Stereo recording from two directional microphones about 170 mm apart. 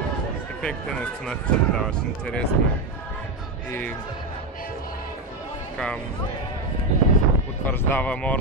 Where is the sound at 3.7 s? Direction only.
10° left (ahead or behind).